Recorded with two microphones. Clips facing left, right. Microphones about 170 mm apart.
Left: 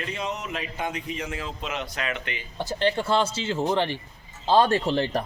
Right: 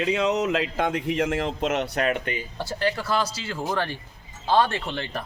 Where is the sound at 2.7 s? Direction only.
25° left (ahead or behind).